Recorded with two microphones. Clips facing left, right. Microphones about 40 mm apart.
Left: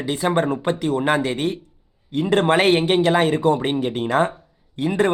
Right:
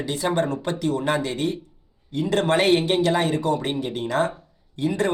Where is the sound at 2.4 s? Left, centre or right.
Left.